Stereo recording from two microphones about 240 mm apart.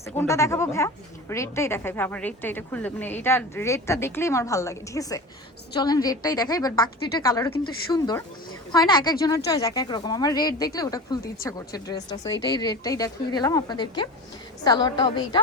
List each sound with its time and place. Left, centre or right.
0.2 s a woman's voice: centre